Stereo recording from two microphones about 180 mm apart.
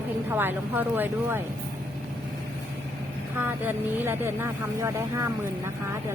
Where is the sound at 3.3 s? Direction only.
10° right (ahead or behind).